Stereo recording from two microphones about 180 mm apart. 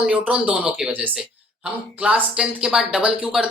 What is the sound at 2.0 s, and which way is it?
Speech, 5° right (ahead or behind).